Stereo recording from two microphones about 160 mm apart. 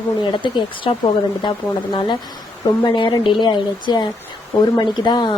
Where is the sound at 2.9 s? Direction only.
30° left (ahead or behind).